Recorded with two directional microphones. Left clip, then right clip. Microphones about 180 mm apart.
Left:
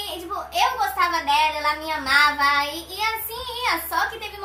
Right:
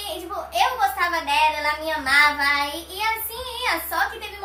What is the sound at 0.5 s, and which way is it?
A woman's voice, 15° left (ahead or behind).